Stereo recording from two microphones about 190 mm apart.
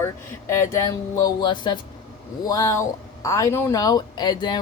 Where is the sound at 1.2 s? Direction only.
20° left (ahead or behind).